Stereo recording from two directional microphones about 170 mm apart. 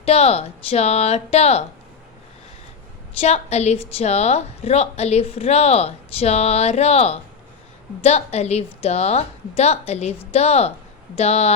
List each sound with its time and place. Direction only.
0.0 s a woman's voice: 40° left (ahead or behind)
3.2 s a woman's voice: 40° left (ahead or behind)